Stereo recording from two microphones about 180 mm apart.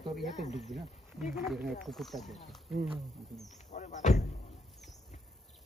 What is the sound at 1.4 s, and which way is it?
Speech, centre (ahead or behind).